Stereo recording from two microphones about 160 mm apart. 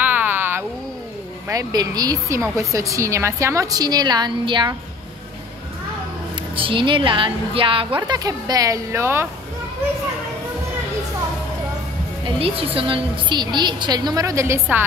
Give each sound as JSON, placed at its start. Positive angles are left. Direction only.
{"t": 0.0, "sound": "a sound", "side_deg": -10}
{"t": 1.5, "sound": "a woman's voice", "side_deg": -25}
{"t": 6.5, "sound": "a woman's voice", "side_deg": -35}
{"t": 12.4, "sound": "a woman's voice", "side_deg": -35}